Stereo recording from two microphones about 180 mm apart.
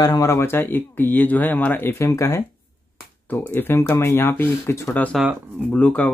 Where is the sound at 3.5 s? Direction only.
10° left (ahead or behind).